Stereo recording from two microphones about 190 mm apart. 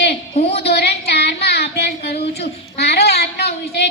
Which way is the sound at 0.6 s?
60° left (ahead or behind).